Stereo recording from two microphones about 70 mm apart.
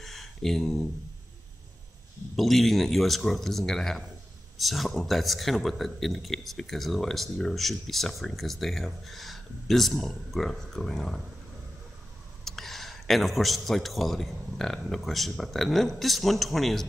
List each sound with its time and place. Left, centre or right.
0.0 s a sound: centre
2.3 s speech: centre
12.4 s speech: centre